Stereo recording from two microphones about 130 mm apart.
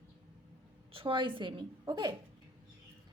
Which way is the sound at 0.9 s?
40° right (ahead or behind).